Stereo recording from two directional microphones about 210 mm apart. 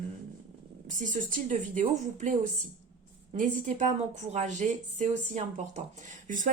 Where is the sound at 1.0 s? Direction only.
40° right (ahead or behind).